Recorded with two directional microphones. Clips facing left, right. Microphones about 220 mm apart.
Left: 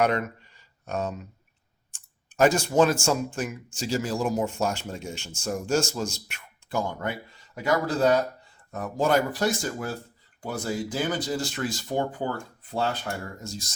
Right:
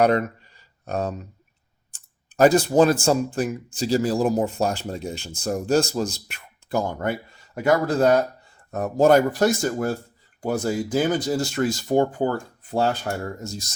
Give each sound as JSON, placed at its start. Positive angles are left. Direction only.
{"t": 0.0, "sound": "speech", "side_deg": -35}